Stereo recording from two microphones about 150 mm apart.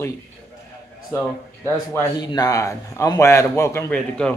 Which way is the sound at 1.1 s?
15° left (ahead or behind).